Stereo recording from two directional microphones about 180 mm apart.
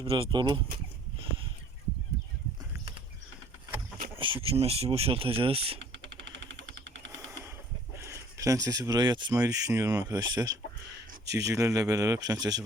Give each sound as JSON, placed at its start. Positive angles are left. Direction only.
{"t": 0.0, "sound": "speech", "side_deg": -30}
{"t": 4.2, "sound": "speech", "side_deg": -30}
{"t": 6.5, "sound": "jackhammer", "side_deg": -85}
{"t": 7.9, "sound": "speech", "side_deg": -15}